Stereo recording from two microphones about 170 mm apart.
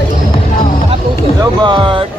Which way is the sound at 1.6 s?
30° right (ahead or behind).